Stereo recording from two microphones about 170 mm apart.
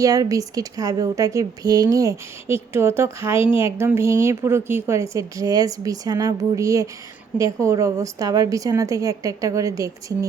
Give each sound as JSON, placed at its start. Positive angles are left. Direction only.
{"t": 0.0, "sound": "a woman's voice", "side_deg": -20}